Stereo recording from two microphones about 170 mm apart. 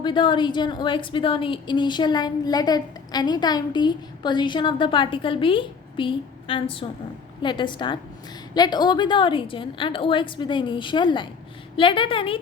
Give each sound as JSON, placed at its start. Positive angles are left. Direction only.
{"t": 0.0, "sound": "a woman's voice", "side_deg": 30}